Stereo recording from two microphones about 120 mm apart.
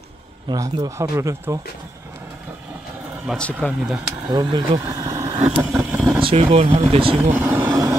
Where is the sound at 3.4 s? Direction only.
10° left (ahead or behind).